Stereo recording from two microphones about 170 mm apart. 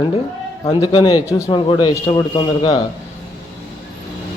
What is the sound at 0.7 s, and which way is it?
A man's voice, 30° left (ahead or behind).